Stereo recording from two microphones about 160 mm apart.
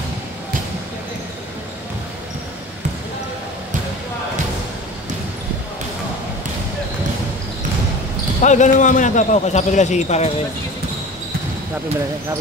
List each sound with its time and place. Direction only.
8.4 s speech: 50° left (ahead or behind)